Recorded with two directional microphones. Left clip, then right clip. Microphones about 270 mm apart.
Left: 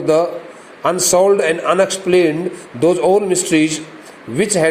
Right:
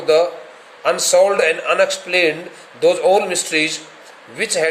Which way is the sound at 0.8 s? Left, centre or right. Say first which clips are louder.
Even; centre.